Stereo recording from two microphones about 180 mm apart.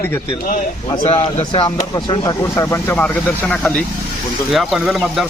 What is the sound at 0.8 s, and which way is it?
Speech, 25° left (ahead or behind).